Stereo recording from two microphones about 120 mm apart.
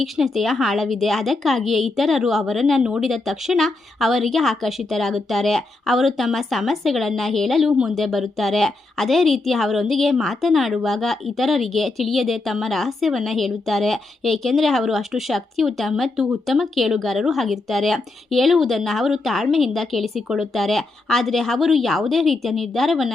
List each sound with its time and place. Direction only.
0.0 s a woman's voice: centre (ahead or behind)